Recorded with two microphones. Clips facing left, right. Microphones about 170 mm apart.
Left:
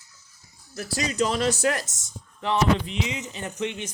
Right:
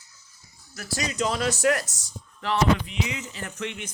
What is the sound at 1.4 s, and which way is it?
Speech, 25° left (ahead or behind).